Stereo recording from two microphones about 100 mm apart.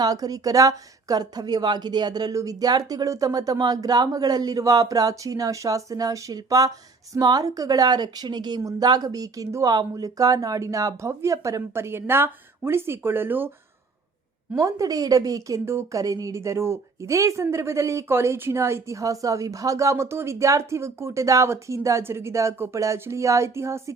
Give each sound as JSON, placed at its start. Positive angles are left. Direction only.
{"t": 0.0, "sound": "speech", "side_deg": -40}
{"t": 14.5, "sound": "a woman's voice", "side_deg": -35}